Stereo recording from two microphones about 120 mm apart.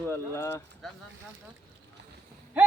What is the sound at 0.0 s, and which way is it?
Speech, 15° left (ahead or behind).